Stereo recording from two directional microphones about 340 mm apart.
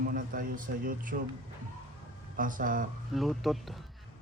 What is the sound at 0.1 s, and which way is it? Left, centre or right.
Speech, right.